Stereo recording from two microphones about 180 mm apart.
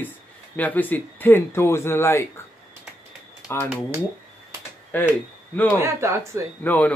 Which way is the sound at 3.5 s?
15° left (ahead or behind).